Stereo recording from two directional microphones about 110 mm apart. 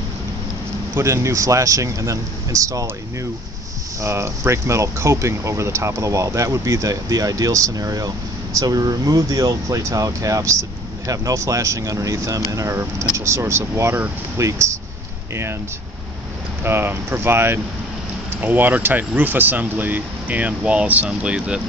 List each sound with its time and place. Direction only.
0.9 s speech: 25° right (ahead or behind)
4.0 s speech: 25° right (ahead or behind)
16.6 s speech: 20° right (ahead or behind)